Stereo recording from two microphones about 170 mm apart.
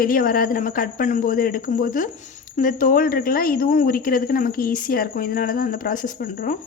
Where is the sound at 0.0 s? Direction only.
55° left (ahead or behind).